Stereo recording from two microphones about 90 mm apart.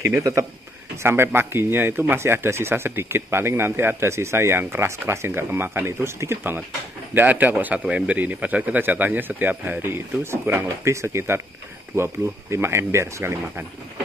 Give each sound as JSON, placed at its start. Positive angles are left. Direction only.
{"t": 0.0, "sound": "speech", "side_deg": -25}